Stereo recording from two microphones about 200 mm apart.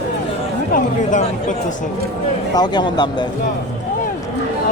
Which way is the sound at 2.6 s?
20° left (ahead or behind).